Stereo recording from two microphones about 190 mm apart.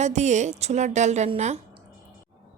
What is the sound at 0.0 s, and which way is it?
Speech, 35° right (ahead or behind).